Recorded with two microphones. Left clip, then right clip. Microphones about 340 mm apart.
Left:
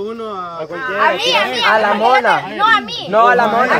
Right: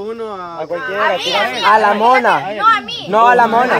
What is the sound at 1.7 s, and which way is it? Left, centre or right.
Speech, right.